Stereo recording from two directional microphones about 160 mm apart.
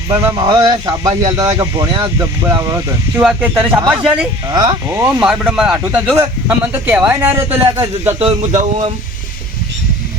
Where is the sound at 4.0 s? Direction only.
5° right (ahead or behind).